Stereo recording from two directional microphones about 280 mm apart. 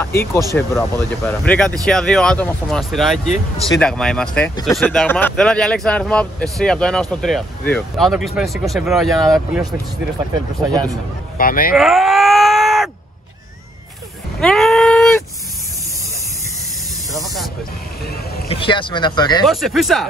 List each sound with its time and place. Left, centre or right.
0.0 s speech: centre
11.3 s speech: left
11.7 s groan: centre
14.4 s a sound: centre
17.1 s spray: centre
18.5 s speech: centre
19.4 s speech: centre